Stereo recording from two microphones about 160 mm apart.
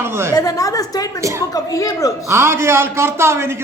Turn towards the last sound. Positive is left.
turn(degrees=-15)  # may be behind; listen again after turning